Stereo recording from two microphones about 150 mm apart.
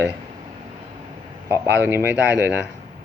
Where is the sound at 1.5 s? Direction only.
15° right (ahead or behind).